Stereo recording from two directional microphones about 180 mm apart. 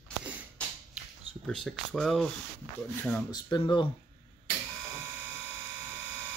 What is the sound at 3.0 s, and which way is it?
Speech, 15° left (ahead or behind).